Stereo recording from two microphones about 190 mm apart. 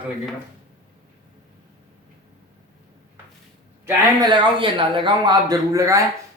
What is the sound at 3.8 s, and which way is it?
A man's voice, 20° right (ahead or behind).